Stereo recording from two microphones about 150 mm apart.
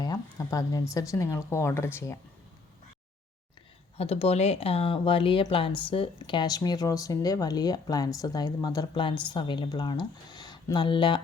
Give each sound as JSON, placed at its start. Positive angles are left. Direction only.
{"t": 0.0, "sound": "speech", "side_deg": 25}
{"t": 3.9, "sound": "speech", "side_deg": 45}